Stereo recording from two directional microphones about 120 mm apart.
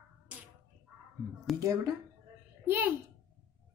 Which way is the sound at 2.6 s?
15° right (ahead or behind).